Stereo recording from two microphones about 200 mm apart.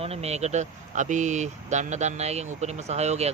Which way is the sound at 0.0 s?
30° right (ahead or behind).